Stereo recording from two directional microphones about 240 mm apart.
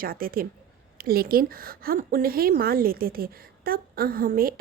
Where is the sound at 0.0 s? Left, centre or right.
Right.